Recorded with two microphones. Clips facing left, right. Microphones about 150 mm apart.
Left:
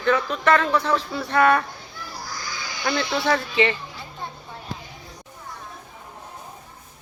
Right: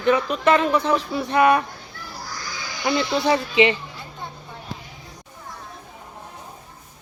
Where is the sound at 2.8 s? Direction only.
15° right (ahead or behind).